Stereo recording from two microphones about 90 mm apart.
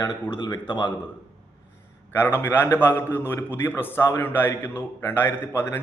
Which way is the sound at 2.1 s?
25° left (ahead or behind).